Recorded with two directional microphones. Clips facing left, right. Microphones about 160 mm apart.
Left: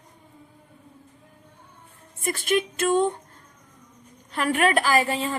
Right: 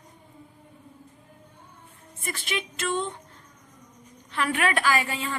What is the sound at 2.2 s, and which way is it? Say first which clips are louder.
Speech: left 9 dB; 45° left (ahead or behind).